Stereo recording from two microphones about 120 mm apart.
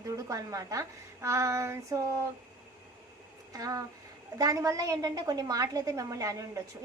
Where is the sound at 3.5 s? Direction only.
30° right (ahead or behind).